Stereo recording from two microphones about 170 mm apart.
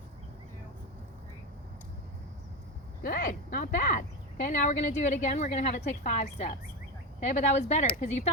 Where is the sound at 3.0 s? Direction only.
55° left (ahead or behind).